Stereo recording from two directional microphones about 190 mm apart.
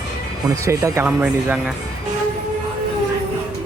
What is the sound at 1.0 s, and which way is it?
Speech, 5° right (ahead or behind).